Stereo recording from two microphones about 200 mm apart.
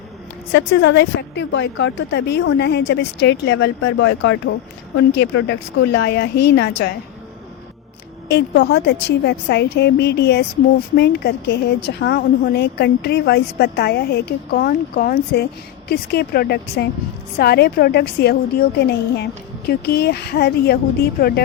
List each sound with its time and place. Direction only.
0.5 s a woman's voice: 60° left (ahead or behind)
8.3 s a woman's voice: 55° left (ahead or behind)